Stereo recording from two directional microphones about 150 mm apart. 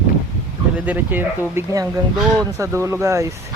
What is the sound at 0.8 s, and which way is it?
Speech, 10° right (ahead or behind).